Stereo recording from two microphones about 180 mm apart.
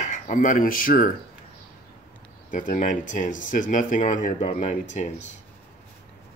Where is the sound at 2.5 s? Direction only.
45° left (ahead or behind).